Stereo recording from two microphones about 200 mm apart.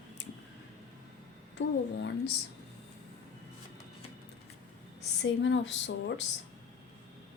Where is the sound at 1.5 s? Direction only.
60° left (ahead or behind).